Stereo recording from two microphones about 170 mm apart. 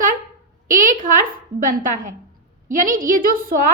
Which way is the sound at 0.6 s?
50° right (ahead or behind).